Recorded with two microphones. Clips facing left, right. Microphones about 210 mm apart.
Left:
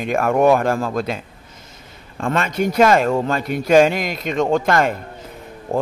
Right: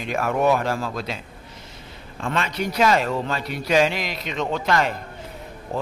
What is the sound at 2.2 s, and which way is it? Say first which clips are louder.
A man's voice: left 6 dB; 50° left (ahead or behind).